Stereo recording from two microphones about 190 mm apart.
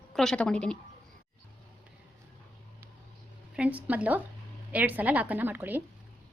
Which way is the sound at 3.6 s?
5° right (ahead or behind).